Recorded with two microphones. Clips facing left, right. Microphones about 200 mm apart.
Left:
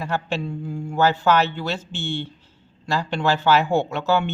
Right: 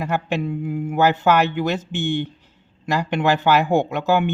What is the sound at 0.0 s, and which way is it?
Speech, 15° right (ahead or behind).